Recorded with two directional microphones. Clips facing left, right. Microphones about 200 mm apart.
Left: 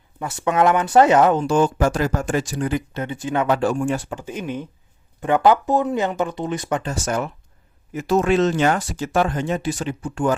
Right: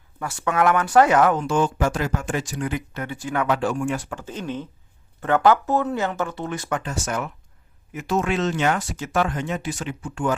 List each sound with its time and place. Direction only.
0.2 s speech: 20° left (ahead or behind)
1.5 s speech: 40° left (ahead or behind); by 3.5 s 20° left (ahead or behind)
3.5 s speech: 35° left (ahead or behind)
4.2 s speech: 15° left (ahead or behind)
7.0 s speech: 35° left (ahead or behind)